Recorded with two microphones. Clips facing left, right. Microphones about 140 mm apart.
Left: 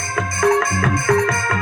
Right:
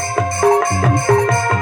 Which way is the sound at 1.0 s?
25° right (ahead or behind).